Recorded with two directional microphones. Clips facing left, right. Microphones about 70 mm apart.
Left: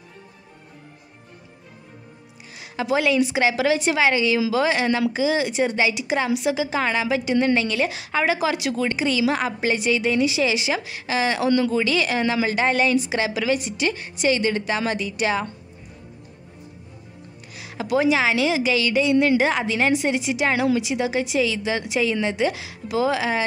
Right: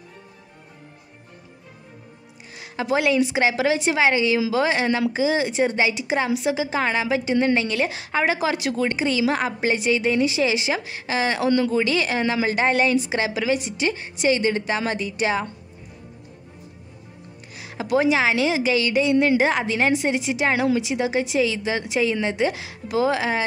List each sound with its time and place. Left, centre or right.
2.5 s a woman's voice: right
17.6 s a woman's voice: right